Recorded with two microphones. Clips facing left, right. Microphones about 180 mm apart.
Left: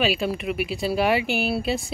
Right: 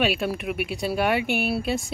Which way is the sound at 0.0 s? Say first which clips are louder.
Left 1 dB; centre (ahead or behind).